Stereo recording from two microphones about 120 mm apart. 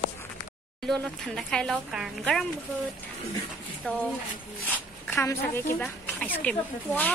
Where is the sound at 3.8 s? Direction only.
10° left (ahead or behind).